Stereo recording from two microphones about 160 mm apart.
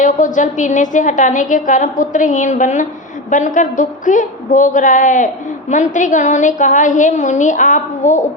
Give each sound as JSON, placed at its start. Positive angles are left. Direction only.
{"t": 0.0, "sound": "a woman's voice", "side_deg": 55}